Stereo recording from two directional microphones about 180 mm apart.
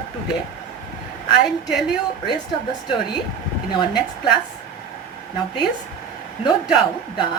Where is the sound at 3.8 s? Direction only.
25° left (ahead or behind).